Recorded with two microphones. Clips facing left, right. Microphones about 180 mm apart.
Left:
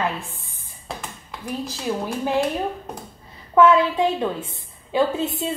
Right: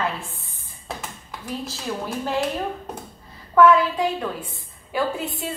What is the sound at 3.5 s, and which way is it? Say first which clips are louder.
A woman's voice: even; 25° left (ahead or behind).